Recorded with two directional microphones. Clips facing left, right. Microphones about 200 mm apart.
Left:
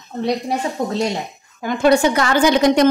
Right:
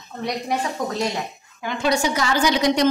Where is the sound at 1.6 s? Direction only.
50° left (ahead or behind).